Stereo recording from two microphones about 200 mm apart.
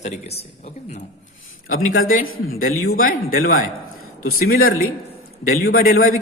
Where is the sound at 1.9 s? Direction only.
45° left (ahead or behind).